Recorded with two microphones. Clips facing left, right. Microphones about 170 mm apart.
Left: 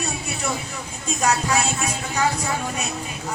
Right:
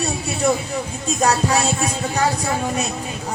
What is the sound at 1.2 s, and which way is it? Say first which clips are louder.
Music: right 3 dB; 35° right (ahead or behind).